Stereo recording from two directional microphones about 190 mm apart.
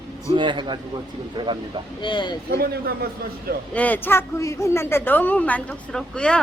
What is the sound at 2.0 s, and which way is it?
Speech, 25° left (ahead or behind).